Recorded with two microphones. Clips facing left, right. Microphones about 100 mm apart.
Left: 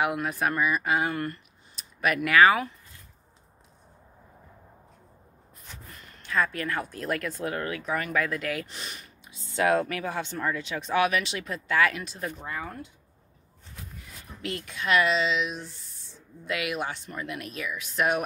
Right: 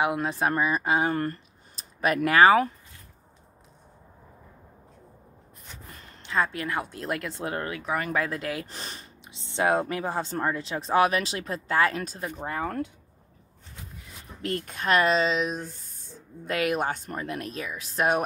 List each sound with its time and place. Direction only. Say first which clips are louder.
0.0 s speech: right 1 dB; 30° right (ahead or behind)
6.0 s speech: right 1 dB; 25° right (ahead or behind)
12.4 s speech: right 5 dB; 50° right (ahead or behind)
14.4 s speech: right 3 dB; 40° right (ahead or behind)